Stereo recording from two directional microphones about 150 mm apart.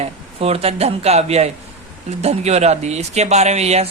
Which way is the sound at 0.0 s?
40° right (ahead or behind).